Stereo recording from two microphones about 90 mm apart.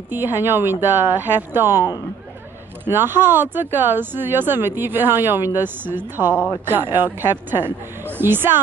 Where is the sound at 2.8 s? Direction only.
25° right (ahead or behind).